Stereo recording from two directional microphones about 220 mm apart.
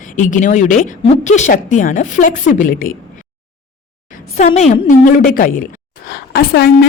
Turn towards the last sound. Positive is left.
turn(degrees=40)  # may be behind; listen again after turning